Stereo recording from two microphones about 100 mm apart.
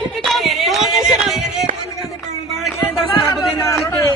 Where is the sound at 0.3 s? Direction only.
Centre (ahead or behind).